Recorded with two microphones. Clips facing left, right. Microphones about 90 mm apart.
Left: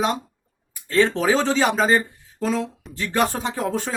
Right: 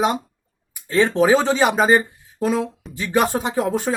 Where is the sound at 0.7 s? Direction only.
15° right (ahead or behind).